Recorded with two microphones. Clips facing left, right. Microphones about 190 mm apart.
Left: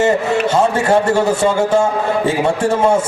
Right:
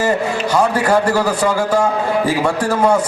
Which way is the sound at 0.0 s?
25° left (ahead or behind).